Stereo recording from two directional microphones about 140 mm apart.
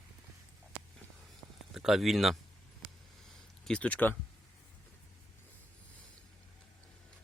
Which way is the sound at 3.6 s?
10° left (ahead or behind).